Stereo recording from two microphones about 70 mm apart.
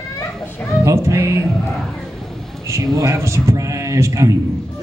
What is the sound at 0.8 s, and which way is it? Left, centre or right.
Speech, right.